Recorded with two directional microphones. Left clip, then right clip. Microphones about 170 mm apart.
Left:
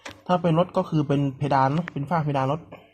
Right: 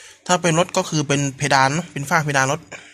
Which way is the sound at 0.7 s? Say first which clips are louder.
Right 4 dB; 35° right (ahead or behind).